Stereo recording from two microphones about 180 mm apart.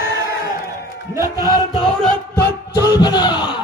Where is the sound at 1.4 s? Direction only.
20° left (ahead or behind).